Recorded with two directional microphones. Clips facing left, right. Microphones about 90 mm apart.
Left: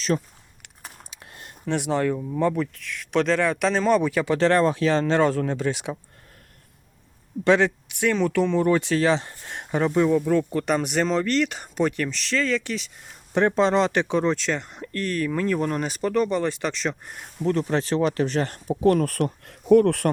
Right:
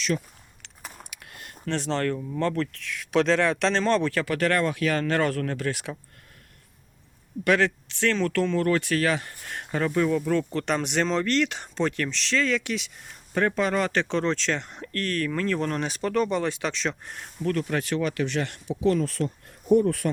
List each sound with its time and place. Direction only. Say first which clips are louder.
0.1 s speech: left 5 dB; 40° left (ahead or behind)
1.1 s a sound: even; 30° left (ahead or behind)
1.6 s speech: left 3 dB; 15° left (ahead or behind)
7.4 s speech: left 3 dB; 20° left (ahead or behind); by 12.9 s centre (ahead or behind)
13.3 s speech: left 4 dB; 25° left (ahead or behind); by 17.2 s 5° left (ahead or behind)
17.4 s speech: left 3 dB; 25° left (ahead or behind); by 19.3 s 55° left (ahead or behind)
19.5 s speech: left 4 dB; 90° left; by 20.1 s 70° left (ahead or behind)